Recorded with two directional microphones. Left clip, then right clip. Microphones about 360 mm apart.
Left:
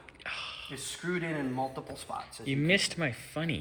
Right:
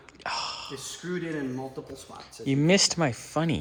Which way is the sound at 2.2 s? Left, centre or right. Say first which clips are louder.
Right 8 dB; centre.